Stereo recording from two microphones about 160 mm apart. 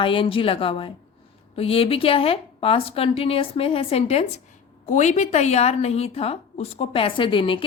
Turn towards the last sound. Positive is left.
turn(degrees=30)  # may be behind; listen again after turning